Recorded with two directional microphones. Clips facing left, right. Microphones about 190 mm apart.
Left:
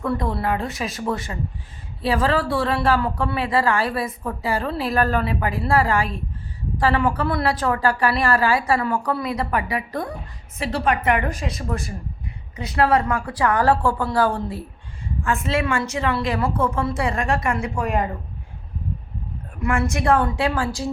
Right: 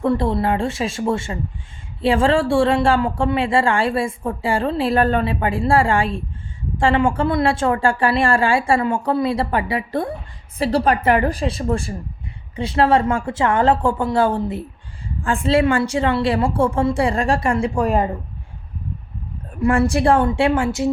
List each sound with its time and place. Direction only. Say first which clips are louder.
0.0 s a woman's voice: right 5 dB; 25° right (ahead or behind)
19.5 s speech: right 6 dB; 30° right (ahead or behind)